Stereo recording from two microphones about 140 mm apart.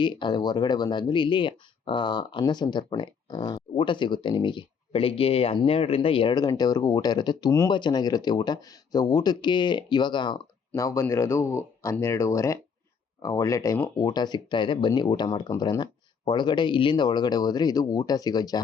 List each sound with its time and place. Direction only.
0.0 s speech: 35° left (ahead or behind)
10.7 s speech: 20° left (ahead or behind)